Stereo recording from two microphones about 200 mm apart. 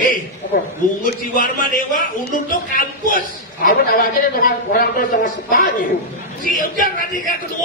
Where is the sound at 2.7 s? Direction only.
45° left (ahead or behind).